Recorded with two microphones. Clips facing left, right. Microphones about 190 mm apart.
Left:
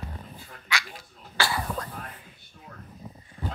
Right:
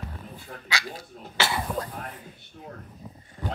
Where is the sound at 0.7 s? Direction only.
35° right (ahead or behind).